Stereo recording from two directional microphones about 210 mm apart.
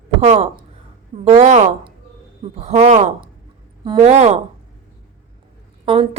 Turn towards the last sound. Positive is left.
turn(degrees=-25)  # may be behind; listen again after turning